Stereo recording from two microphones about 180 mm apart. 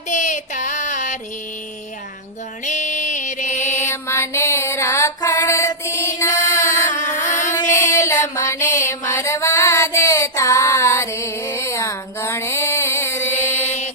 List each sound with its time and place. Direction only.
0.1 s a sound: 40° left (ahead or behind)
2.6 s mantra: 40° left (ahead or behind)
3.8 s female singing: 15° left (ahead or behind)
7.3 s music: 15° left (ahead or behind)